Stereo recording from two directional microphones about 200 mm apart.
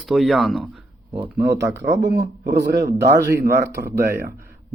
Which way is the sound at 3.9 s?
50° right (ahead or behind).